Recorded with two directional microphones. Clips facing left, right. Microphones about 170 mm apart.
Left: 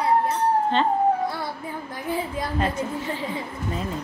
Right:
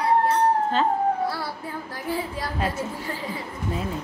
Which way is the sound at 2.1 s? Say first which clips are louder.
Left 1 dB; 20° left (ahead or behind).